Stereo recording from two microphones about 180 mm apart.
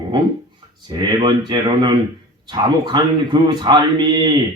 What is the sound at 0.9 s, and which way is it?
Speech, 25° right (ahead or behind).